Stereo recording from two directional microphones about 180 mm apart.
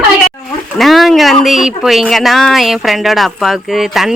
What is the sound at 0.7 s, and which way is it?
Speech, centre (ahead or behind).